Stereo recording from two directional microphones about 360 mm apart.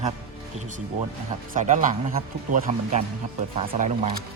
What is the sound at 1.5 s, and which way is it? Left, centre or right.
Speech, right.